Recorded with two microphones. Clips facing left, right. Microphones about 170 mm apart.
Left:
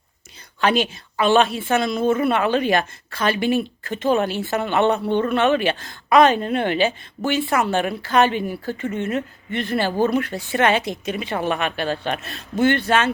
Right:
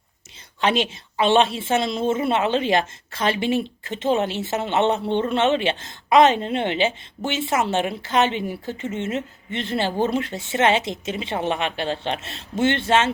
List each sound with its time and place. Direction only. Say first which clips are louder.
0.6 s a woman's voice: left 2 dB; 25° right (ahead or behind)